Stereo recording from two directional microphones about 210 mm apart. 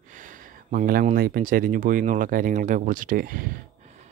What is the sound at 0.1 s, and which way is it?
Speech, 40° right (ahead or behind).